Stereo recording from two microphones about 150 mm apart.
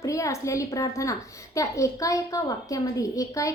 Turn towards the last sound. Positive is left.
turn(degrees=20)  # may be behind; listen again after turning